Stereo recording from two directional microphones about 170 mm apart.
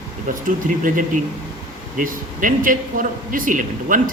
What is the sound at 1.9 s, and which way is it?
Speech, 55° right (ahead or behind).